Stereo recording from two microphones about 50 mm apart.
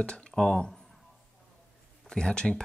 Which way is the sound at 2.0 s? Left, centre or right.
Centre.